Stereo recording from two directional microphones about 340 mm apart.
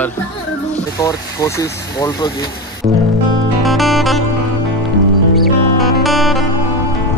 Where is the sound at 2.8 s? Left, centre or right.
Right.